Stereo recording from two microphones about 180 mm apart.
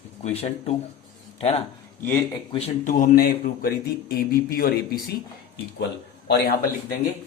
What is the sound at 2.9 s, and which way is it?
Speech, 55° left (ahead or behind).